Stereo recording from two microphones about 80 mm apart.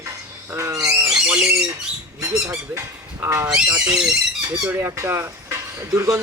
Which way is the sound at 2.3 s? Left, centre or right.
Right.